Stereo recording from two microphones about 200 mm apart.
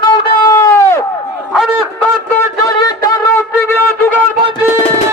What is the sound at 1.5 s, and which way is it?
Honk, centre (ahead or behind).